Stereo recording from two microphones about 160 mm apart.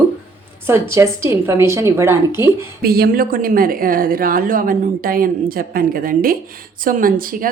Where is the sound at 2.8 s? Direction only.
75° right (ahead or behind).